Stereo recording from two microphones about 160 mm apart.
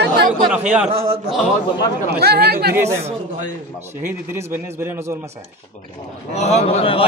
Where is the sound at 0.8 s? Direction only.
40° right (ahead or behind).